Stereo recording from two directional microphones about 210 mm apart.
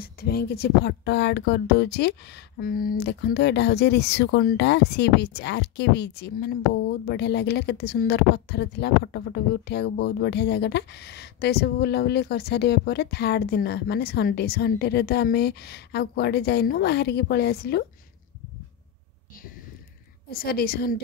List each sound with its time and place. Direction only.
0.0 s speech: 45° left (ahead or behind)
20.2 s speech: 45° left (ahead or behind)